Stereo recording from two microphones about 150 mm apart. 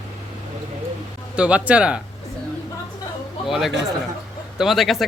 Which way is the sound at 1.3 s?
5° right (ahead or behind).